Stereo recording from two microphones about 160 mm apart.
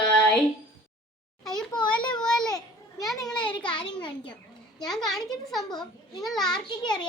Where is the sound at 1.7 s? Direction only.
30° left (ahead or behind).